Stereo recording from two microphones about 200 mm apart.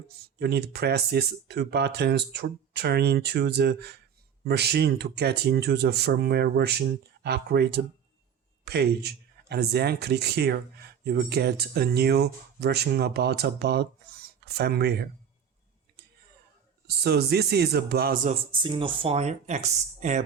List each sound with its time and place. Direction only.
0.3 s speech: 55° right (ahead or behind)
16.8 s speech: 55° right (ahead or behind)
18.5 s speech: 25° right (ahead or behind)